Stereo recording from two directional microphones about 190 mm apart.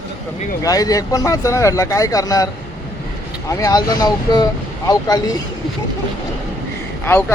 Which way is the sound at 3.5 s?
20° left (ahead or behind).